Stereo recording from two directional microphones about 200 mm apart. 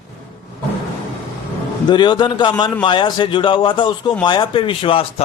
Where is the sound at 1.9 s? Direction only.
20° left (ahead or behind).